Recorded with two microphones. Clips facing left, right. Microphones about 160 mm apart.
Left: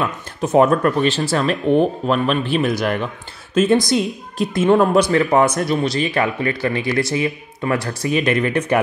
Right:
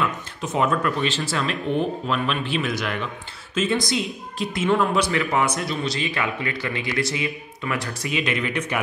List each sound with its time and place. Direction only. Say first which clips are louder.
0.0 s speech: left 4 dB; 45° left (ahead or behind)